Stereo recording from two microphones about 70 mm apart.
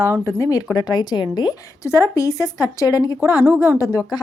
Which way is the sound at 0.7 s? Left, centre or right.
Left.